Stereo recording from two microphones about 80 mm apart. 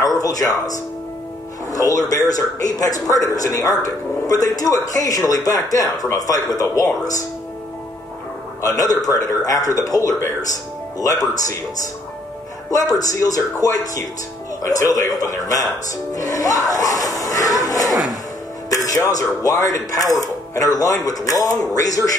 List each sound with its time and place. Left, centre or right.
0.2 s a man's voice: left
8.5 s a man's voice: left
13.1 s a man's voice: left
16.2 s crowd: left
18.7 s music: left
19.1 s a man's voice: left